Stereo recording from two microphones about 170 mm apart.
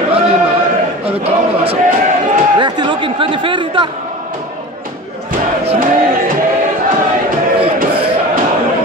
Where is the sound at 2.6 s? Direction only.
30° right (ahead or behind).